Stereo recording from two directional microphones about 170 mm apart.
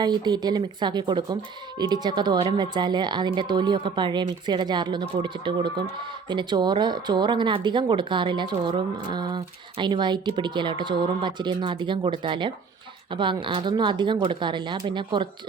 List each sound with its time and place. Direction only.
0.0 s speech: 25° right (ahead or behind)